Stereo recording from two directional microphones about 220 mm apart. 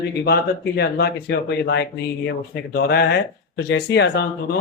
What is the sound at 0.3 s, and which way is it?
Speech, 45° left (ahead or behind).